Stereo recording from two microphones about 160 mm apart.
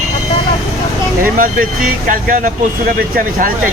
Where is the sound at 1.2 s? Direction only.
60° right (ahead or behind).